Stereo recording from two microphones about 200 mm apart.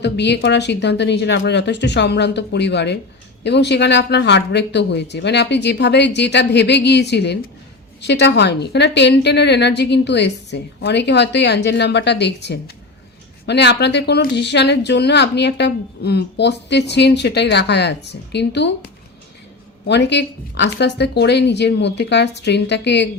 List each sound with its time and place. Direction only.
0.0 s speech: 60° left (ahead or behind)
19.9 s speech: 60° left (ahead or behind)